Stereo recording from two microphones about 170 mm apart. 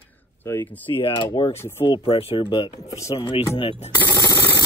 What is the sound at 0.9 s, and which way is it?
Speech, 30° left (ahead or behind).